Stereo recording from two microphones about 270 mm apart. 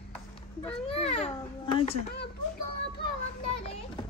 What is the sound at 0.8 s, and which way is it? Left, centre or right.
A child's voice, left.